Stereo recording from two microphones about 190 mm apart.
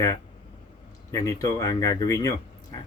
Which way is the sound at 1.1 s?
15° left (ahead or behind).